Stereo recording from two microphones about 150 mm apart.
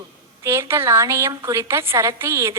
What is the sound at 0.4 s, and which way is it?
A woman's voice, 15° right (ahead or behind).